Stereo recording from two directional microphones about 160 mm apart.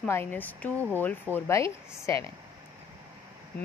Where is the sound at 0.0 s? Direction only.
10° left (ahead or behind).